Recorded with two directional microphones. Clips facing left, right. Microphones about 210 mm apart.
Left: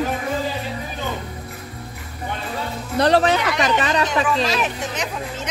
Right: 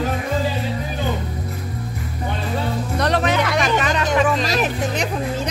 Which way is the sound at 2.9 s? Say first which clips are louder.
Left 5 dB; 30° left (ahead or behind).